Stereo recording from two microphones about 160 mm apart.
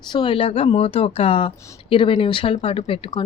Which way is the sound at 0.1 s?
30° left (ahead or behind).